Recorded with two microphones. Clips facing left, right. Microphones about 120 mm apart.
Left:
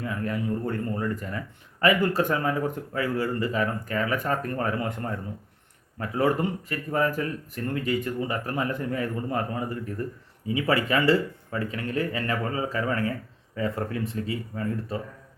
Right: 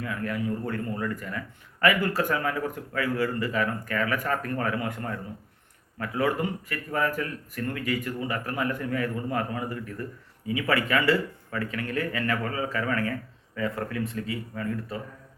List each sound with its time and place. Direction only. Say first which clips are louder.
0.0 s speech: left 1 dB; 25° left (ahead or behind)